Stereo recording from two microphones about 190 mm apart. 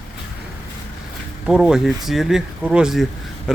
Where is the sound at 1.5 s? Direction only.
5° right (ahead or behind).